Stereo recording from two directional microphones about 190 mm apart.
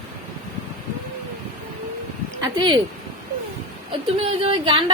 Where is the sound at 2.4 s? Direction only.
25° right (ahead or behind).